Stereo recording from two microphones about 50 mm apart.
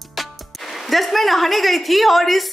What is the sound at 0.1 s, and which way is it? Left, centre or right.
Speech, centre.